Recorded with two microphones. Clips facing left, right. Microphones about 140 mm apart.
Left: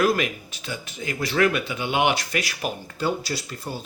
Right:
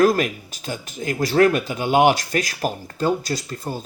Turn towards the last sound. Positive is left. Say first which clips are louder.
# right 4 dB
turn(degrees=-45)  # may be behind; listen again after turning